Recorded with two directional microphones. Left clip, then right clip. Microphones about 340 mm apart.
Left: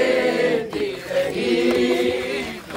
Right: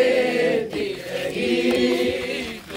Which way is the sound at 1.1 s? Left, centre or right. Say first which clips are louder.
Left 3 dB; centre.